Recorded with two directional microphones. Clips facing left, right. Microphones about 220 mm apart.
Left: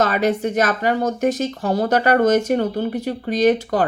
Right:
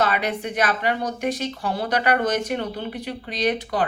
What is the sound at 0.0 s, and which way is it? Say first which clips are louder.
Speech: left 5 dB; 45° left (ahead or behind).